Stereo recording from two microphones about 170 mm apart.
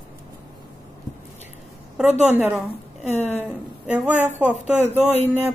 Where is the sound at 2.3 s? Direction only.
15° right (ahead or behind).